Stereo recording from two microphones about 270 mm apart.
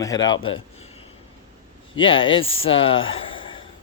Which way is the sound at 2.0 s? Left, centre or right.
Centre.